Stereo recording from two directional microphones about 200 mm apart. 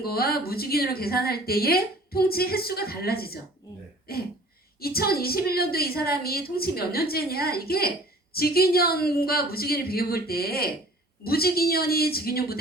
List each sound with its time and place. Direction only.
0.0 s a woman's voice: 50° left (ahead or behind)